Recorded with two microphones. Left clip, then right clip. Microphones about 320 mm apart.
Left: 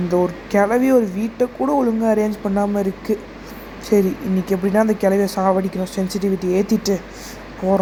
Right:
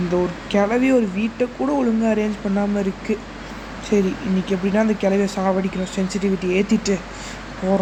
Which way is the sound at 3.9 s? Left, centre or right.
Centre.